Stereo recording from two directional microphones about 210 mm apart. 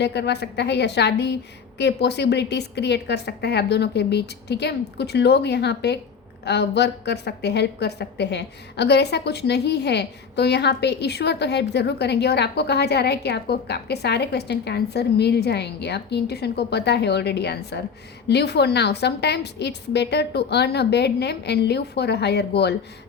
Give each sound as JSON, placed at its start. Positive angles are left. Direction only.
{"t": 0.0, "sound": "a woman's voice", "side_deg": 55}